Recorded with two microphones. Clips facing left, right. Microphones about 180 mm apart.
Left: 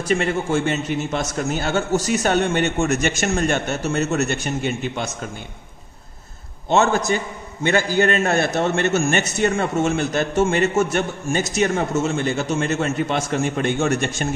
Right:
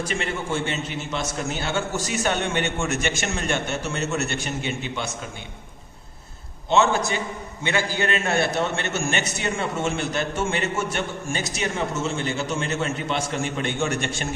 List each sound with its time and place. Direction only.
0.1 s a man's voice: 40° left (ahead or behind)
6.7 s a man's voice: 45° left (ahead or behind)